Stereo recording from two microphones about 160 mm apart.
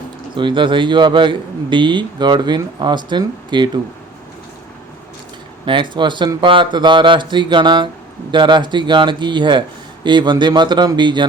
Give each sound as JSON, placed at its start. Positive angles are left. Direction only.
{"t": 0.3, "sound": "a man's voice", "side_deg": -30}
{"t": 5.6, "sound": "a man's voice", "side_deg": -30}